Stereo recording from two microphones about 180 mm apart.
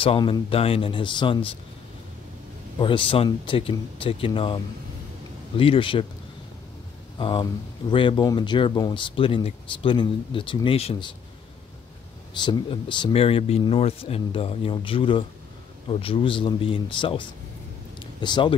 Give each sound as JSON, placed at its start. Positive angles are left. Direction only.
{"t": 0.0, "sound": "speech", "side_deg": 30}
{"t": 2.8, "sound": "speech", "side_deg": 30}
{"t": 5.6, "sound": "speech", "side_deg": 30}
{"t": 7.2, "sound": "speech", "side_deg": 25}
{"t": 12.4, "sound": "speech", "side_deg": 25}
{"t": 17.9, "sound": "a sound", "side_deg": 25}